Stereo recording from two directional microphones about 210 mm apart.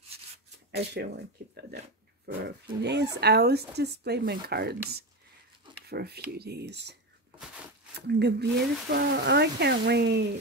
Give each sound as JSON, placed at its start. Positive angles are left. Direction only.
{"t": 0.7, "sound": "speech", "side_deg": -55}
{"t": 8.1, "sound": "speech", "side_deg": -55}